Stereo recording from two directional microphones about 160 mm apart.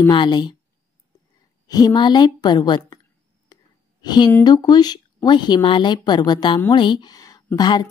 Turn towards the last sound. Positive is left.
turn(degrees=25)  # may be behind; listen again after turning